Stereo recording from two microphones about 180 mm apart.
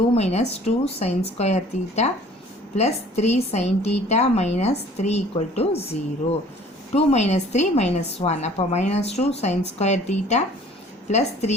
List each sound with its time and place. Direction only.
0.1 s a woman's voice: 35° left (ahead or behind)
6.9 s a woman's voice: 40° left (ahead or behind)